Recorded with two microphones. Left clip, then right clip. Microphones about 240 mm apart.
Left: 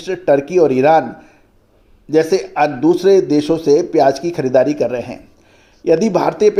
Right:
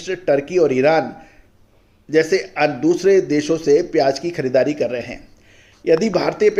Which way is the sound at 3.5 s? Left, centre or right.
Left.